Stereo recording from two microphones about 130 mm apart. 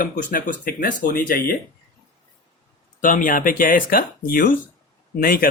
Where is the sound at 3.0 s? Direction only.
90° left.